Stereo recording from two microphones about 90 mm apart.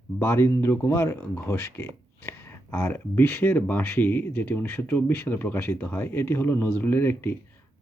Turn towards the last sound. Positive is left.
turn(degrees=25)  # may be behind; listen again after turning